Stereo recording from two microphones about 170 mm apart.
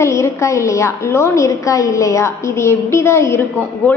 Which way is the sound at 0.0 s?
15° left (ahead or behind).